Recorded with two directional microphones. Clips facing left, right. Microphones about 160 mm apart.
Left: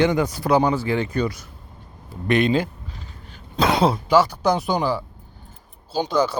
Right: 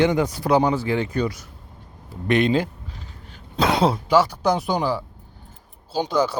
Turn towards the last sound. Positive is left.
turn(degrees=-10)  # may be behind; listen again after turning